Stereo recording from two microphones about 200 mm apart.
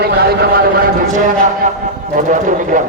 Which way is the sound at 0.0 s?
50° right (ahead or behind).